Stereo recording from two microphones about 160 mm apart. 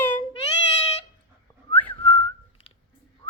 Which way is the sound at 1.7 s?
10° left (ahead or behind).